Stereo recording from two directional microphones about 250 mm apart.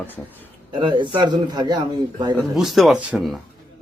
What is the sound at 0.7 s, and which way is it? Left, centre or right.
A man's voice, centre.